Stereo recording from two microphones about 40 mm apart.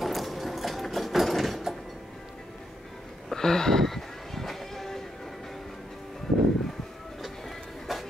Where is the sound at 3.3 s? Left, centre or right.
Centre.